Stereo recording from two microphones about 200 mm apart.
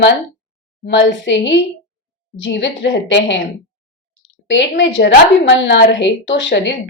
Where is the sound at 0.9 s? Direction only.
65° left (ahead or behind).